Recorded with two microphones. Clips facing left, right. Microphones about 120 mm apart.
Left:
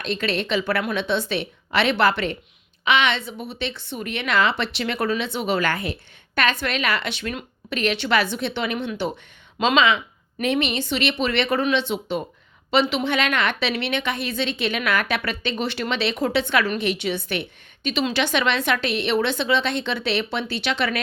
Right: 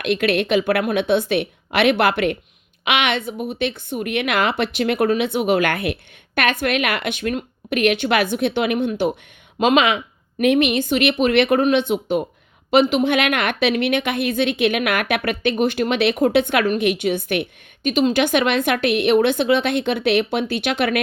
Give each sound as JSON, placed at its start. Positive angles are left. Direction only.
{"t": 0.0, "sound": "a woman's voice", "side_deg": -60}